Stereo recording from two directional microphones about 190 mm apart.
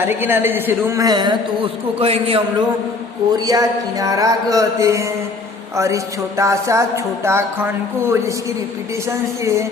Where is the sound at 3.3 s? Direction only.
20° right (ahead or behind).